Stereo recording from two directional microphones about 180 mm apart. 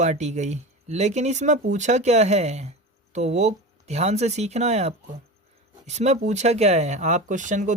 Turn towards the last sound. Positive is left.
turn(degrees=-45)  # may be behind; listen again after turning